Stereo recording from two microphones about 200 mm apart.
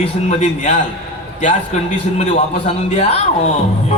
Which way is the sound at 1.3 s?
40° left (ahead or behind).